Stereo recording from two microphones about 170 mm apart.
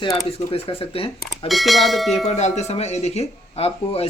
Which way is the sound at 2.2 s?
40° left (ahead or behind).